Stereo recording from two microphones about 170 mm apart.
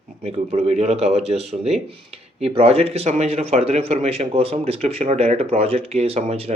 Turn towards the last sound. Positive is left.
turn(degrees=-40)  # may be behind; listen again after turning